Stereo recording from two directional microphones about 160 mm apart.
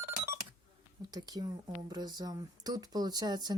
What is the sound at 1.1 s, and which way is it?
Speech, 25° right (ahead or behind).